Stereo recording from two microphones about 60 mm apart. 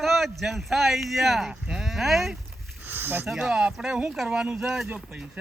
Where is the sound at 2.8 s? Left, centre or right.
Right.